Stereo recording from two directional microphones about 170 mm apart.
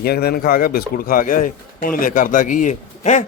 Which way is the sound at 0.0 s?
65° left (ahead or behind).